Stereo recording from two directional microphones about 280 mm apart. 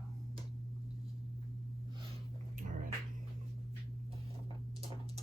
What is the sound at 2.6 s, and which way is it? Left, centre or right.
Hum, right.